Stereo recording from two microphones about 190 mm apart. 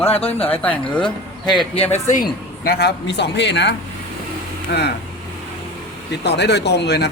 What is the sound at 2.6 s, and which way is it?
A man's voice, 60° left (ahead or behind).